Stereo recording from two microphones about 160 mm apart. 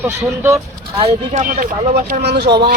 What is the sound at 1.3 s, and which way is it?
Speech, 55° right (ahead or behind).